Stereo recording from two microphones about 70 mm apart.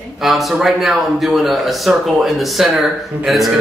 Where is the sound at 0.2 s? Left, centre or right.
Centre.